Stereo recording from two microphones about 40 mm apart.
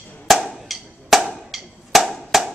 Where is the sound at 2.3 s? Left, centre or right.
Centre.